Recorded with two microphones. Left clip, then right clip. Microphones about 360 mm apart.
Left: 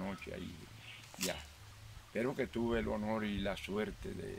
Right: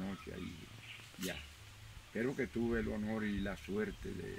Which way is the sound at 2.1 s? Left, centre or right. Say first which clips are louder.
Left 1 dB; centre.